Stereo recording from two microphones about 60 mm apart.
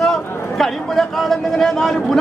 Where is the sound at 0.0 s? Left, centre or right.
Centre.